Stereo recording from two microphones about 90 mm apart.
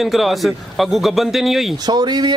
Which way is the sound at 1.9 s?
50° right (ahead or behind).